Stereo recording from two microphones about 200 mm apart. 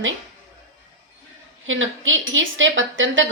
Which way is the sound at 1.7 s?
75° right (ahead or behind).